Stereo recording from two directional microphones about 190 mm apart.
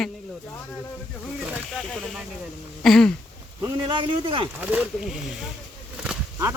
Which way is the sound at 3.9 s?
25° right (ahead or behind).